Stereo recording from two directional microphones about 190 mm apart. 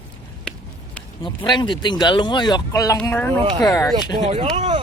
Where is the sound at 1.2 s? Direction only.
25° left (ahead or behind).